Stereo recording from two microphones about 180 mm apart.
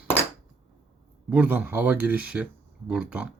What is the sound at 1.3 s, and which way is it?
Speech, 10° right (ahead or behind).